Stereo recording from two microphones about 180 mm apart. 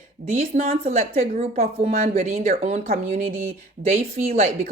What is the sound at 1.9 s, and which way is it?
Speech, 40° right (ahead or behind).